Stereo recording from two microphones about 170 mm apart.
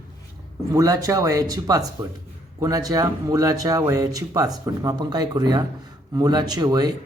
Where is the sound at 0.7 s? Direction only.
20° right (ahead or behind).